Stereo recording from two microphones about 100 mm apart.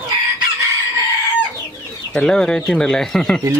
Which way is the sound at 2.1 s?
5° left (ahead or behind).